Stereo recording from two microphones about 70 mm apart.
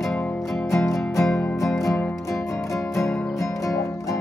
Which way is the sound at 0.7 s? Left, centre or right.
Left.